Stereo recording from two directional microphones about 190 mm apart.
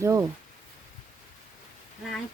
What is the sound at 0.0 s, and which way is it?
Speech, 15° right (ahead or behind).